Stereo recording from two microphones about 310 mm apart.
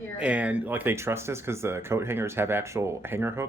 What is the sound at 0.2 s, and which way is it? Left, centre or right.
Speech, centre.